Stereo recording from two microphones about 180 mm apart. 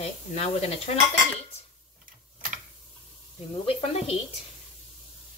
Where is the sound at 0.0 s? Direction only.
35° left (ahead or behind).